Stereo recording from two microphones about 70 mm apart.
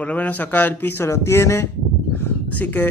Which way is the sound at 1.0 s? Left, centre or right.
Left.